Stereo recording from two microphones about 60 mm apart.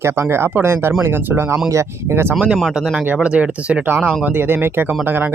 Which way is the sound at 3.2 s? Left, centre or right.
Centre.